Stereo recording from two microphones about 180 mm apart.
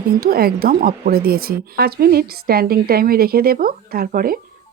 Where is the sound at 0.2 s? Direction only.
55° right (ahead or behind).